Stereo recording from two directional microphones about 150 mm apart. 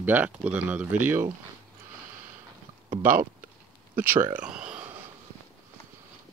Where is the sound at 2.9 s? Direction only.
65° right (ahead or behind).